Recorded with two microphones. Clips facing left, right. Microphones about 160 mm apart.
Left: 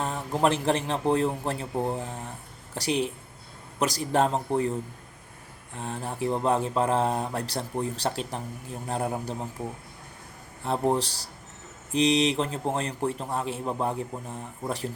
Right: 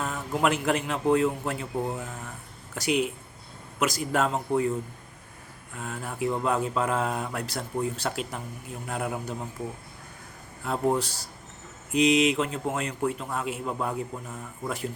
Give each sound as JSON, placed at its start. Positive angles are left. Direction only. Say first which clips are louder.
{"t": 0.0, "sound": "a man's voice", "louder": "left 1 dB", "side_deg": 30}
{"t": 5.7, "sound": "a man's voice", "louder": "left 2 dB", "side_deg": 30}
{"t": 10.6, "sound": "a man's voice", "louder": "left 1 dB", "side_deg": 30}